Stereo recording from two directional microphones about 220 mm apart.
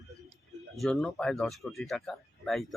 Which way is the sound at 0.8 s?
Centre (ahead or behind).